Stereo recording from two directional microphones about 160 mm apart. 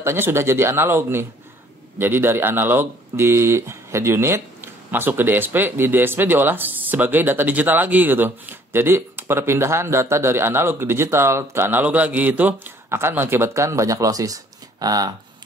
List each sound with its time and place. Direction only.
0.0 s speech: 15° right (ahead or behind)